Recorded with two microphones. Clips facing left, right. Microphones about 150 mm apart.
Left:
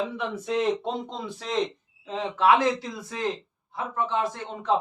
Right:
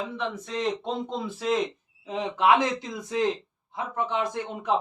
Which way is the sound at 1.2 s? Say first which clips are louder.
Right 6 dB; 5° right (ahead or behind).